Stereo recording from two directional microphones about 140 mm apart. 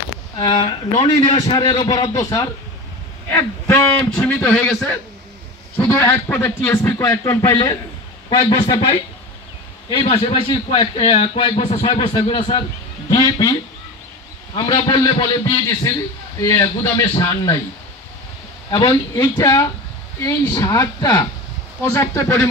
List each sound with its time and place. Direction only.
0.4 s a man's voice: 35° left (ahead or behind)
10.0 s a man's voice: 45° left (ahead or behind)
15.9 s a man's voice: 20° left (ahead or behind)
18.7 s a man's voice: 30° left (ahead or behind)